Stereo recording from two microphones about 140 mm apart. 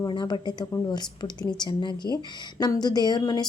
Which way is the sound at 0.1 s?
35° left (ahead or behind).